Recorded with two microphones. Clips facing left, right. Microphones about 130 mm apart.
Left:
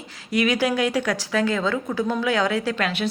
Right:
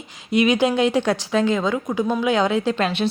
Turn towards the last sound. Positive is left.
turn(degrees=-25)  # may be behind; listen again after turning